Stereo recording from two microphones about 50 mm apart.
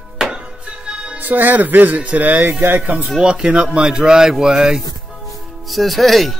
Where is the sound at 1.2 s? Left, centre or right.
Right.